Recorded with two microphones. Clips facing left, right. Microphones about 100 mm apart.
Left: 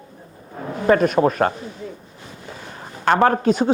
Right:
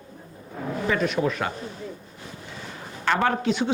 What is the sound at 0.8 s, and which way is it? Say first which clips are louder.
Speech: left 9 dB; 45° left (ahead or behind).